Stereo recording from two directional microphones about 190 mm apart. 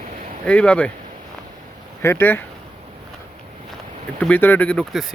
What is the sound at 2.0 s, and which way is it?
Speech, 10° left (ahead or behind).